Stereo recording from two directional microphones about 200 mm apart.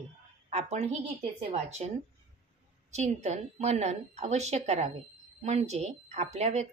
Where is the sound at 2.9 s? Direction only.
35° right (ahead or behind).